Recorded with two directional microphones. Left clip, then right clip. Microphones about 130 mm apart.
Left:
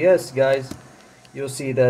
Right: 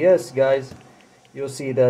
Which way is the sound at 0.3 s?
15° right (ahead or behind).